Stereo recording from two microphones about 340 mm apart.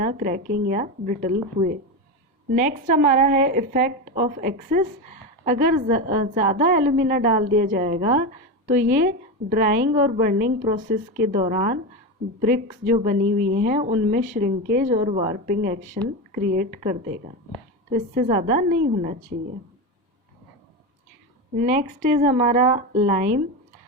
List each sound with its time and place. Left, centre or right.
0.0 s speech: right
21.6 s speech: right